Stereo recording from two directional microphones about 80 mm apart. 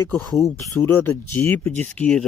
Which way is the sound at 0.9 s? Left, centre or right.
Left.